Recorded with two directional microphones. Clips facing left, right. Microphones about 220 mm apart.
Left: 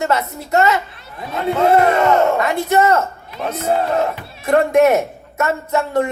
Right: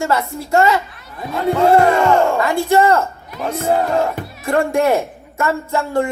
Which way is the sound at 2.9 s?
30° left (ahead or behind).